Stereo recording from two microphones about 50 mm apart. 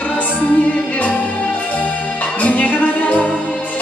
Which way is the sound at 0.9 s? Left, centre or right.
Left.